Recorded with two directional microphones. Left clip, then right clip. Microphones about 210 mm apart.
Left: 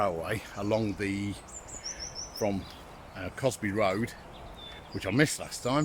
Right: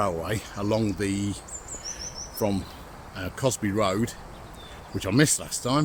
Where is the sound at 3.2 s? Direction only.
10° right (ahead or behind).